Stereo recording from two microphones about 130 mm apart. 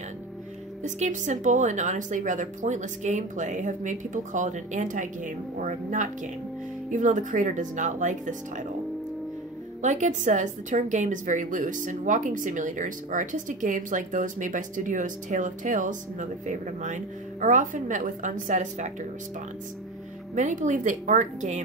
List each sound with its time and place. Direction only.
0.8 s a woman's voice: 70° right (ahead or behind)
9.8 s a woman's voice: 70° right (ahead or behind)
20.3 s a woman's voice: 75° right (ahead or behind)